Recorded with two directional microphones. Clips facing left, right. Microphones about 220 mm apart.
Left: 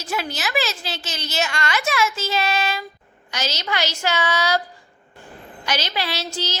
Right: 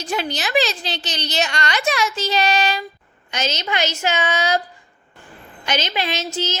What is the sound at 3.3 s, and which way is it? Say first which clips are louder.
A woman's voice: right 2 dB; 20° right (ahead or behind).